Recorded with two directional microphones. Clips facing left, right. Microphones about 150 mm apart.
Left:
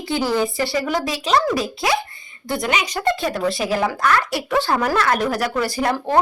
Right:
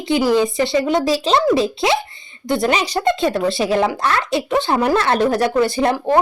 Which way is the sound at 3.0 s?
20° right (ahead or behind).